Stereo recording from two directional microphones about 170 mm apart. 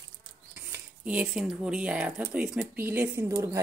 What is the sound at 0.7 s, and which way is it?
Speech, 10° right (ahead or behind).